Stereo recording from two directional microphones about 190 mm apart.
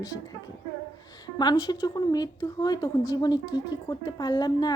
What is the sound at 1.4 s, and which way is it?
Speech, 20° left (ahead or behind).